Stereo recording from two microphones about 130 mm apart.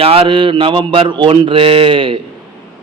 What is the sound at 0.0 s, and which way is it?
A man's voice, 45° right (ahead or behind).